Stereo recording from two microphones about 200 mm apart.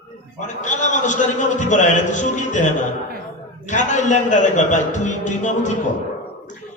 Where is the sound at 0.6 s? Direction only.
35° left (ahead or behind).